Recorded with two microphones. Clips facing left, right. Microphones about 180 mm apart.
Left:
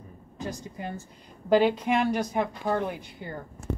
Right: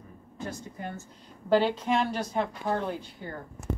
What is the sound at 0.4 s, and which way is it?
A woman's voice, 15° left (ahead or behind).